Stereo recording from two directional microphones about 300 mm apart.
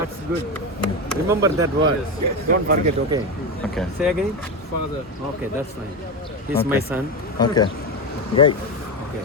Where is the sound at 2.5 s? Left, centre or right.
Right.